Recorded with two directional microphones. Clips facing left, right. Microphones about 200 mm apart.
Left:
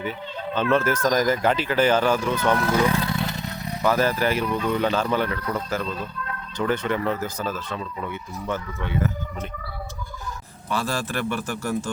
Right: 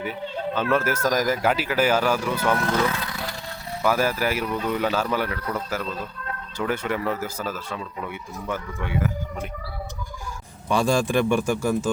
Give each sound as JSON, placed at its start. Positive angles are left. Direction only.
{"t": 0.5, "sound": "speech", "side_deg": -10}
{"t": 2.6, "sound": "speech", "side_deg": 10}
{"t": 2.9, "sound": "vehicle", "side_deg": 25}
{"t": 3.8, "sound": "speech", "side_deg": -10}
{"t": 10.7, "sound": "speech", "side_deg": -15}